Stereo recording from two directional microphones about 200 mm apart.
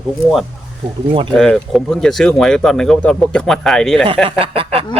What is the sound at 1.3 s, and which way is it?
Speech, 5° left (ahead or behind).